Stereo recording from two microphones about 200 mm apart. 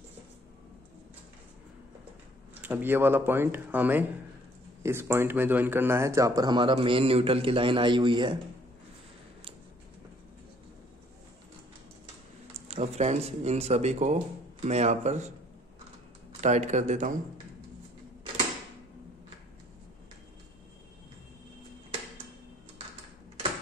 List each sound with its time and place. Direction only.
2.6 s a man's voice: 10° right (ahead or behind)
12.5 s speech: 30° right (ahead or behind)
16.3 s speech: 35° right (ahead or behind)